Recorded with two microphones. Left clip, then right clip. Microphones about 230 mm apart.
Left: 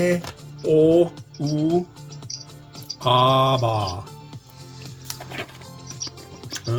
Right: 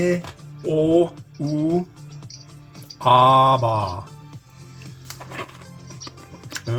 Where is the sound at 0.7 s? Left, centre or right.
Centre.